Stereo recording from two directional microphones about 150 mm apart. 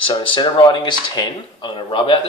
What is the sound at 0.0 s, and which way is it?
Speech, 35° left (ahead or behind).